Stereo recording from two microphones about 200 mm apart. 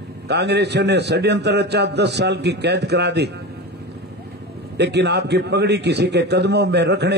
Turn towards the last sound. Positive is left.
turn(degrees=-55)  # may be behind; listen again after turning